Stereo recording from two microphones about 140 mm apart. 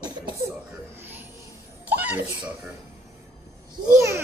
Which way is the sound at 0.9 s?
15° right (ahead or behind).